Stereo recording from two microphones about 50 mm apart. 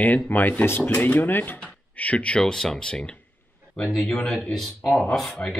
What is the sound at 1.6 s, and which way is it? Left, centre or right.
Speech, left.